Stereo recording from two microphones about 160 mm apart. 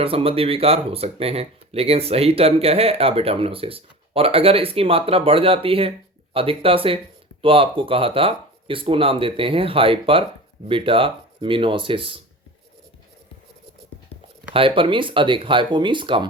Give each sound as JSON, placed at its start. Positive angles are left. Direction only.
{"t": 0.0, "sound": "speech", "side_deg": -35}
{"t": 14.8, "sound": "speech", "side_deg": -30}